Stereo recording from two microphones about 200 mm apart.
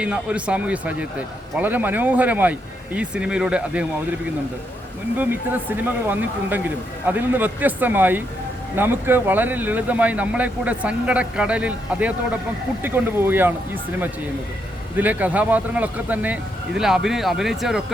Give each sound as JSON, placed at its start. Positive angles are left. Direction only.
{"t": 0.0, "sound": "speech", "side_deg": -5}
{"t": 5.1, "sound": "speech", "side_deg": -10}
{"t": 14.9, "sound": "speech", "side_deg": -10}